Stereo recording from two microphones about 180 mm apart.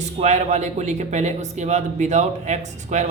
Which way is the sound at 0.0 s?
40° right (ahead or behind).